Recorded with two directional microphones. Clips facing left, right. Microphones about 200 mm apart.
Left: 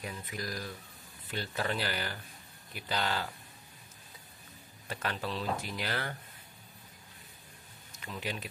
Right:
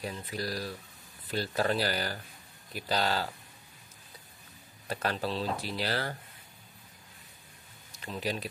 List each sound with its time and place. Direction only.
0.0 s speech: 35° right (ahead or behind)
4.8 s speech: 35° right (ahead or behind)
8.0 s speech: 35° right (ahead or behind)